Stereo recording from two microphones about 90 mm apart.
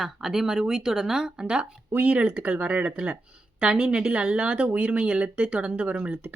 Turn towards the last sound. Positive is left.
turn(degrees=-15)  # may be behind; listen again after turning